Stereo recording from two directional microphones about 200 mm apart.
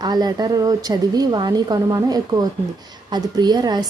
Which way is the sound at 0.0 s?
20° right (ahead or behind).